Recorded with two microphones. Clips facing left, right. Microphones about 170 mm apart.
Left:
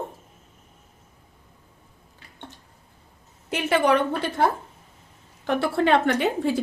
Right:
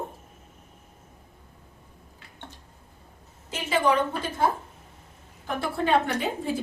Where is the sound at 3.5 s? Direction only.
65° left (ahead or behind).